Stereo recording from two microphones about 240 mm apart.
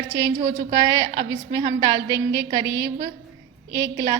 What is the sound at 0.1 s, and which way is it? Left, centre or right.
A woman's voice, centre.